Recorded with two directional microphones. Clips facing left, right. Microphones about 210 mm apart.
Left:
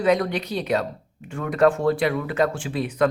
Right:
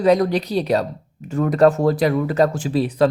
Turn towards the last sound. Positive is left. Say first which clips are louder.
# right 5 dB
turn(degrees=-35)  # may be behind; listen again after turning